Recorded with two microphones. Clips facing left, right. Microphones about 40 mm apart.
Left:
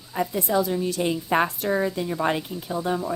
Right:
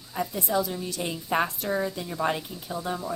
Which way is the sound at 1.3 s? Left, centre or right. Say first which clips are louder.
Left 2 dB; left.